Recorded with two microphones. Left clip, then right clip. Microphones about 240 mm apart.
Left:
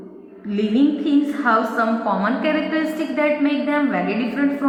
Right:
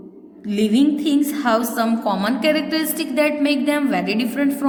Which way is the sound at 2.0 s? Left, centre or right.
Right.